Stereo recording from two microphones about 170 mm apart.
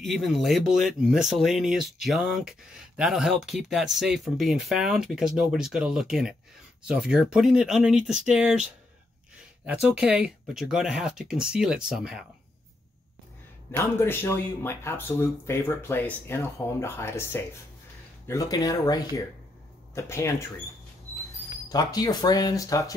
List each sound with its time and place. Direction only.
0.0 s speech: centre (ahead or behind)
9.7 s speech: 5° right (ahead or behind)
13.7 s speech: 15° left (ahead or behind)
21.6 s speech: 20° left (ahead or behind)